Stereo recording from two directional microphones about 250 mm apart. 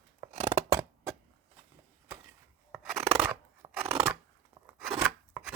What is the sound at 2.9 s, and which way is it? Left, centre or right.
Scissors, right.